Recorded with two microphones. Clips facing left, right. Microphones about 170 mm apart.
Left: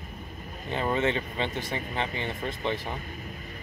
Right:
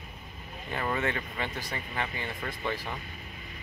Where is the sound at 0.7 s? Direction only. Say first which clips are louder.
Left 4 dB; 20° left (ahead or behind).